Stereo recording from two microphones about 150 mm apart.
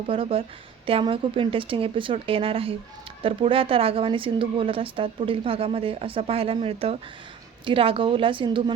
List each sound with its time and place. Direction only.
0.1 s a woman's voice: 40° right (ahead or behind)